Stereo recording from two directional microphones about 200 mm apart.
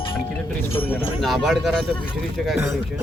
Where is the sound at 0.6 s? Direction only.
10° left (ahead or behind).